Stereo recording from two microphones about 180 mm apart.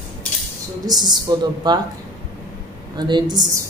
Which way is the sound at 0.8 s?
25° right (ahead or behind).